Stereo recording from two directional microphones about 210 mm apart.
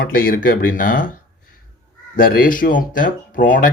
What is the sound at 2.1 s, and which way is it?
Speech, 45° left (ahead or behind).